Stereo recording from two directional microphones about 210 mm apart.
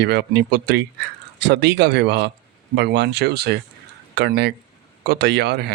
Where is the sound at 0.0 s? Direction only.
50° right (ahead or behind).